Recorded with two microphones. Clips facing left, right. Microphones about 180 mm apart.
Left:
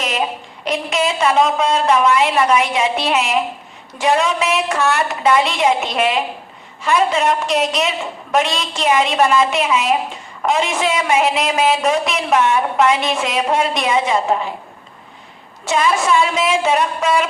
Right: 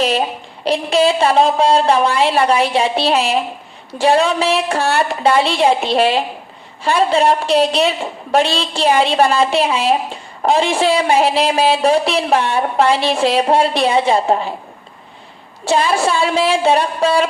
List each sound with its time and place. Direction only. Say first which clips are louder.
0.6 s a woman's voice: right 5 dB; 30° right (ahead or behind)
15.6 s a woman's voice: right 2 dB; 30° right (ahead or behind)